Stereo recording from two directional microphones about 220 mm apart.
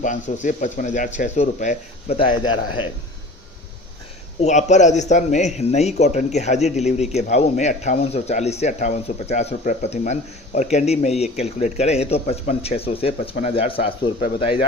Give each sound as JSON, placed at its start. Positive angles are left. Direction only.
{"t": 0.0, "sound": "a man's voice", "side_deg": 35}
{"t": 4.4, "sound": "a man's voice", "side_deg": 30}